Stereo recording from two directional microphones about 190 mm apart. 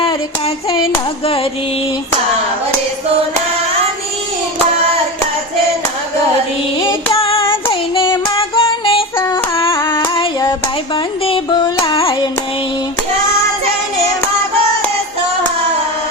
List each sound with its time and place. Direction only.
0.0 s hands: 30° left (ahead or behind)
6.8 s child singing: 30° left (ahead or behind)
8.4 s female singing: 30° left (ahead or behind)
9.2 s yodeling: 25° left (ahead or behind)
9.7 s female singing: 20° left (ahead or behind)
10.9 s carnatic music: 25° left (ahead or behind)